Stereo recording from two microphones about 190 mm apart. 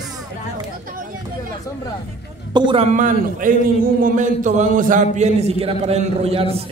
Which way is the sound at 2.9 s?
45° right (ahead or behind).